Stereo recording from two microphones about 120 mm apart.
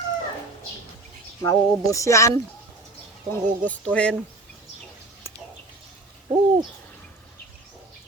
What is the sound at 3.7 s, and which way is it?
Speech, 10° left (ahead or behind).